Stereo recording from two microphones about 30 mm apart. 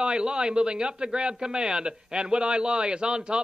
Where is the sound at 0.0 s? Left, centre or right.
Right.